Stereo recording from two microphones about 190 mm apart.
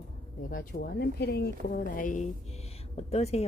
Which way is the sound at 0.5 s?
45° left (ahead or behind).